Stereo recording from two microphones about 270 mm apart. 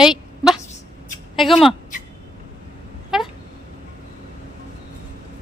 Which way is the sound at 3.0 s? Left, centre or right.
Centre.